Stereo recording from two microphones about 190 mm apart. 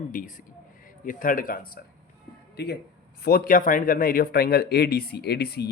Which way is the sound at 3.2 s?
50° left (ahead or behind).